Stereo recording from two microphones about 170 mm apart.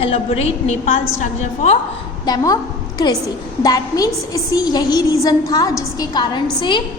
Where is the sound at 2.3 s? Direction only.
25° left (ahead or behind).